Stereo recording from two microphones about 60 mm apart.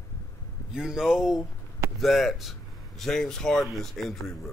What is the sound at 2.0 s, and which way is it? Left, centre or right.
Speech, centre.